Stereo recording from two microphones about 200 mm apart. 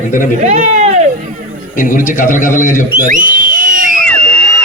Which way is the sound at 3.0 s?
40° right (ahead or behind).